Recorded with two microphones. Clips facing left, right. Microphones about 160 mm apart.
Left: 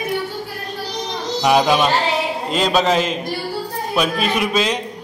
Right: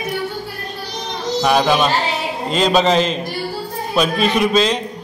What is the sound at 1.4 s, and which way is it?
Speech, 15° left (ahead or behind).